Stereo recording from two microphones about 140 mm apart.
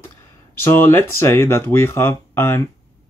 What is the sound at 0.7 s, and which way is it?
Speech, 15° left (ahead or behind).